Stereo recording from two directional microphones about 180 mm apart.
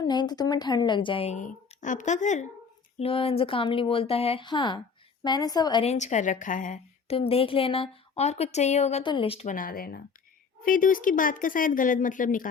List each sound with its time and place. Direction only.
0.0 s a woman's voice: 25° left (ahead or behind); by 2.5 s 40° left (ahead or behind)
3.0 s a woman's voice: 30° left (ahead or behind)
5.8 s speech: 40° left (ahead or behind)
7.2 s a woman's voice: 30° left (ahead or behind)
9.6 s speech: 55° left (ahead or behind)